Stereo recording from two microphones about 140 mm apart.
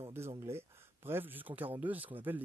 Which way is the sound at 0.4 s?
15° right (ahead or behind).